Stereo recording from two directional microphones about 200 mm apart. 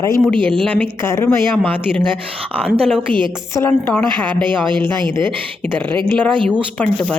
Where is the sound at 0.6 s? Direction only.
5° left (ahead or behind).